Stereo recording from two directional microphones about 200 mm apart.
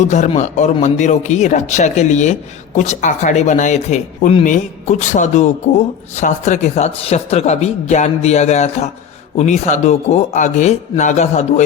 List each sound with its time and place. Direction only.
0.0 s speech: 35° left (ahead or behind)